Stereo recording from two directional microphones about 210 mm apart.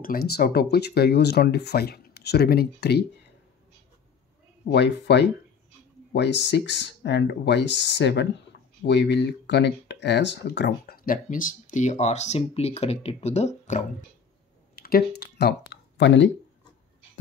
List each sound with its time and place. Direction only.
0.0 s speech: 45° left (ahead or behind)
4.6 s speech: 55° left (ahead or behind); by 13.8 s 35° left (ahead or behind)
14.8 s speech: 45° left (ahead or behind)